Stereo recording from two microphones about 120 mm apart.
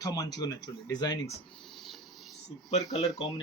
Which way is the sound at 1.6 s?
Centre (ahead or behind).